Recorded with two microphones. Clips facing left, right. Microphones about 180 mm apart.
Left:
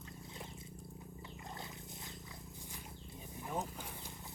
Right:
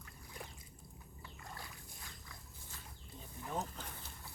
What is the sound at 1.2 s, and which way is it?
Wild animals, 20° left (ahead or behind).